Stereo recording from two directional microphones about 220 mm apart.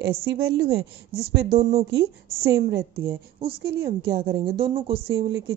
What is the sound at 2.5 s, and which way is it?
A woman's voice, 45° right (ahead or behind).